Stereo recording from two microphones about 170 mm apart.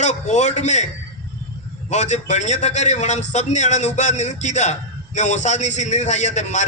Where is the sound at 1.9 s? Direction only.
45° left (ahead or behind).